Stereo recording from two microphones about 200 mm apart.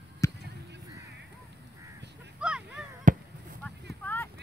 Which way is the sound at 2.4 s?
5° right (ahead or behind).